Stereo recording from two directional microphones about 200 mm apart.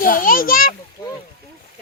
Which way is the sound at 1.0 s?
20° left (ahead or behind).